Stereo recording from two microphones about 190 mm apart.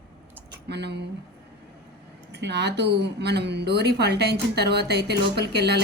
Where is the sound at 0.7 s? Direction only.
60° right (ahead or behind).